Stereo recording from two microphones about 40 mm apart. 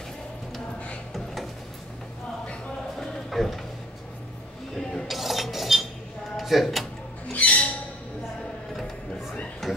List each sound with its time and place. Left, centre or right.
1.1 s drawer open or close: centre
3.0 s a sound: centre
5.0 s cutlery: centre
6.3 s speech: centre
7.3 s music: left
9.6 s a sound: centre